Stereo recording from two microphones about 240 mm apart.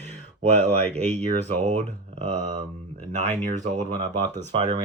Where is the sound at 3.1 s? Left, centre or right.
Right.